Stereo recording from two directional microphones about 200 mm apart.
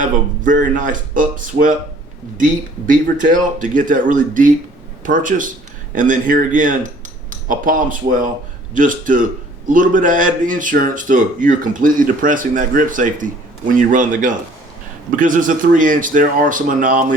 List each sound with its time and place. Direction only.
0.0 s speech: 40° right (ahead or behind)